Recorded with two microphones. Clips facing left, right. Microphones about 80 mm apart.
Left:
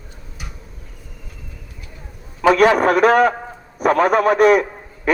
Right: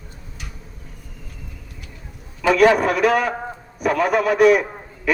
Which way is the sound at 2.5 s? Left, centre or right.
Left.